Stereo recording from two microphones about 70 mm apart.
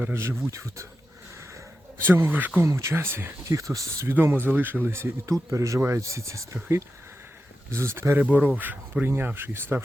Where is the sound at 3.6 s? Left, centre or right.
Right.